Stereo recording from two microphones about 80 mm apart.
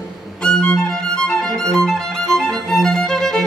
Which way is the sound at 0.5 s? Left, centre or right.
Centre.